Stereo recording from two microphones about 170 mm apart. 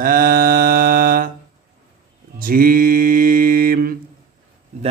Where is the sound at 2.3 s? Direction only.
55° right (ahead or behind).